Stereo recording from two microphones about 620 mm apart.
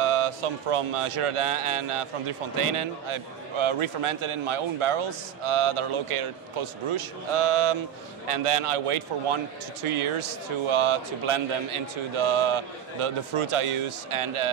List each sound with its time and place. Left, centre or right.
0.0 s speech: right